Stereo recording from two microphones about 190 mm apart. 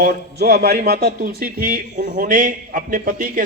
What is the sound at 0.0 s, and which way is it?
Speech, 55° right (ahead or behind).